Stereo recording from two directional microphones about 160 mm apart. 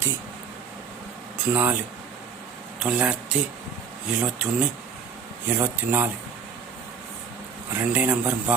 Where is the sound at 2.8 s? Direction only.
10° right (ahead or behind).